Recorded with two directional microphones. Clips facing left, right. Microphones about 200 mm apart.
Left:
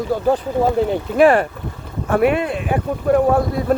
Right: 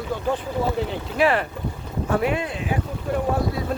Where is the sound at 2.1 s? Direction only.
60° left (ahead or behind).